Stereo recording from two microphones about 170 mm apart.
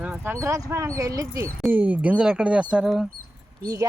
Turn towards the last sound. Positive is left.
turn(degrees=-20)  # may be behind; listen again after turning